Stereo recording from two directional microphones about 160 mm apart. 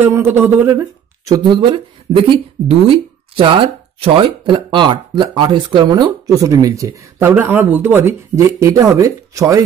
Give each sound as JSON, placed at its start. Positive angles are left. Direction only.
{"t": 0.0, "sound": "speech", "side_deg": -15}